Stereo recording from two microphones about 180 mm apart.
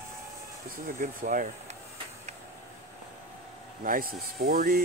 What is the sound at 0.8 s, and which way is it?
Speech, 50° right (ahead or behind).